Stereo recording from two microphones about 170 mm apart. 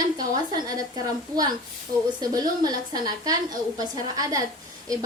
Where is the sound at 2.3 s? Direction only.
20° right (ahead or behind).